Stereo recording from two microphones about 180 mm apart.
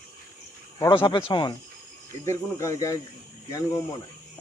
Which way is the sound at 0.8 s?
25° left (ahead or behind).